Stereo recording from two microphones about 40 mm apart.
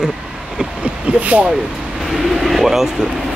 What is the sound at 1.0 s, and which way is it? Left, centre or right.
Speech, right.